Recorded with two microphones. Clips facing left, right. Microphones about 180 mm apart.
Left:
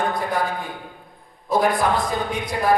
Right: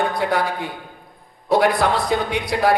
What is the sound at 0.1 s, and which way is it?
A man's voice, 70° right (ahead or behind).